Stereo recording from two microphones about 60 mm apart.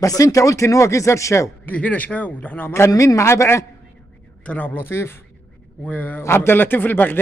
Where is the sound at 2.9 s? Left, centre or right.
Left.